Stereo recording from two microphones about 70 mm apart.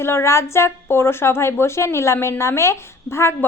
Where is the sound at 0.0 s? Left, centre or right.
Left.